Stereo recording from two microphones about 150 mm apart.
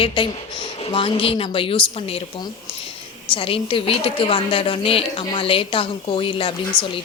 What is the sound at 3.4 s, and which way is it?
A woman's voice, 35° left (ahead or behind).